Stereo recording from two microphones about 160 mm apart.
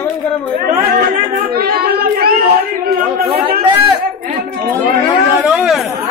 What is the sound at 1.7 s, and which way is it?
Child singing, 75° right (ahead or behind).